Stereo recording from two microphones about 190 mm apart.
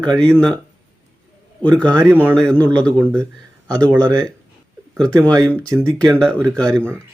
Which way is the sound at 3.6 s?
20° right (ahead or behind).